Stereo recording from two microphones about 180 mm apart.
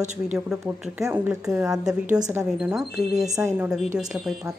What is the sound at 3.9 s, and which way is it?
Speech, 5° right (ahead or behind).